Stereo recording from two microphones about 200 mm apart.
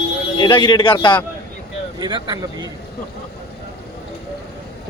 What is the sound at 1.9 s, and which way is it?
Speech, 20° right (ahead or behind).